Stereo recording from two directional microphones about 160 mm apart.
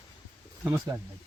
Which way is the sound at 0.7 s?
15° right (ahead or behind).